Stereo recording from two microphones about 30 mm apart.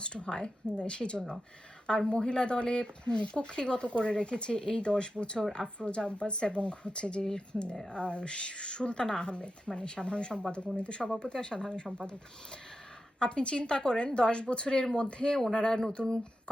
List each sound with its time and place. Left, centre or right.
0.0 s a woman's voice: left
13.1 s a woman's voice: left